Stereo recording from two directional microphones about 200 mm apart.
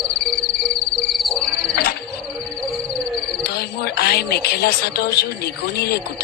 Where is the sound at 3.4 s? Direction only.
50° left (ahead or behind).